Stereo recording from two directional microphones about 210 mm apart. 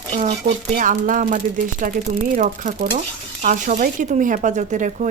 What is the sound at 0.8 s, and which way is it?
Speech, 40° right (ahead or behind).